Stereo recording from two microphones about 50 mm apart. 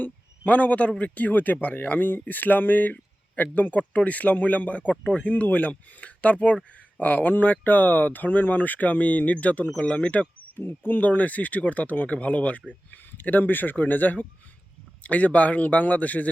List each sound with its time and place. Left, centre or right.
0.0 s speech: left
10.6 s speech: left